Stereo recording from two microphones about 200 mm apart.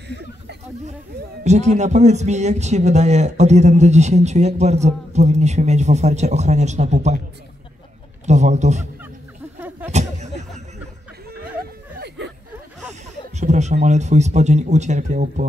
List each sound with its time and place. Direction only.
1.4 s a man's voice: 35° right (ahead or behind)
8.3 s a man's voice: 35° right (ahead or behind)
9.6 s a sound: 10° right (ahead or behind)
9.9 s a sound: 35° right (ahead or behind)
11.6 s snicker: 55° right (ahead or behind)
13.4 s a man's voice: 35° right (ahead or behind)